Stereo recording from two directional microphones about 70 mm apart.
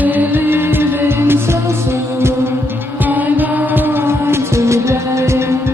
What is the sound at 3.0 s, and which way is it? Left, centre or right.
Music, right.